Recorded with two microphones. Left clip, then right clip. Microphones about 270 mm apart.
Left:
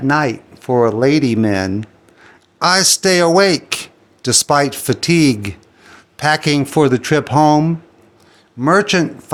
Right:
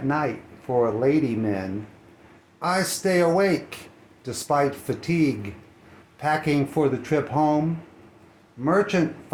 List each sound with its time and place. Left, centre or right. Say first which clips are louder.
0.1 s speech: left 10 dB; left
8.6 s speech: left 8 dB; left